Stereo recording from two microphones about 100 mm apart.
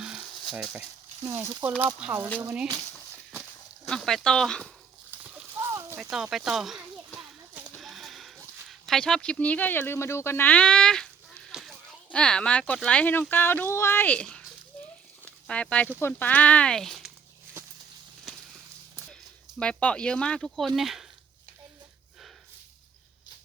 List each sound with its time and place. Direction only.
0.0 s a sound: 5° right (ahead or behind)
1.2 s speech: 30° right (ahead or behind)
3.8 s speech: 5° left (ahead or behind)
5.1 s horse: 15° right (ahead or behind)
5.5 s a sound: 30° right (ahead or behind)
6.0 s speech: 5° right (ahead or behind)
7.8 s a sound: centre (ahead or behind)
12.1 s speech: 10° left (ahead or behind); by 14.1 s 25° left (ahead or behind)
14.1 s speech: 10° left (ahead or behind)
14.7 s a sound: 15° left (ahead or behind)
16.0 s speech: 20° left (ahead or behind); by 17.1 s 5° left (ahead or behind)
19.5 s speech: 10° left (ahead or behind)